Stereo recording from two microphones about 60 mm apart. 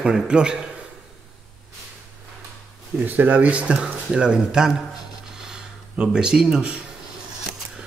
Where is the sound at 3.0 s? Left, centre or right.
Right; by 4.8 s centre.